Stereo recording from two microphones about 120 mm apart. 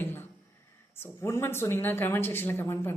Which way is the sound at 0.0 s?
20° left (ahead or behind).